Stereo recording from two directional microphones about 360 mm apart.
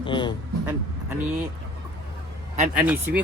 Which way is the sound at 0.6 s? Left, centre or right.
Centre.